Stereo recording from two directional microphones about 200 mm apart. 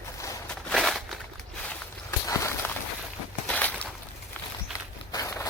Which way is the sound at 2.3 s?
15° left (ahead or behind).